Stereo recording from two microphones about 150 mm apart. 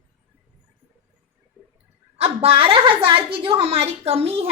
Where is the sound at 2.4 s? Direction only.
40° right (ahead or behind).